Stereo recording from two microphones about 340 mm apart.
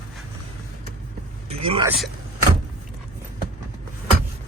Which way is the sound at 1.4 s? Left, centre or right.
Centre.